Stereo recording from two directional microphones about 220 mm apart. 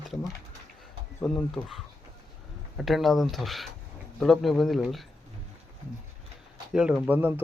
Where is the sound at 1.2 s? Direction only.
5° left (ahead or behind).